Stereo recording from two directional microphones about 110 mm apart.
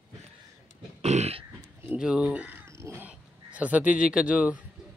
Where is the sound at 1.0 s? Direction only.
80° right.